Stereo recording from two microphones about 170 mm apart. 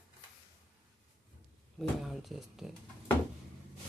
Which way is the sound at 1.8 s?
Centre (ahead or behind).